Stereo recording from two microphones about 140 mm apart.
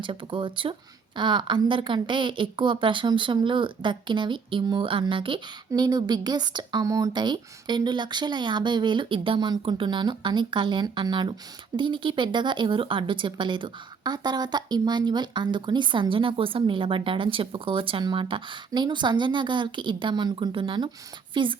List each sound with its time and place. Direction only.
0.0 s a woman's voice: 40° right (ahead or behind)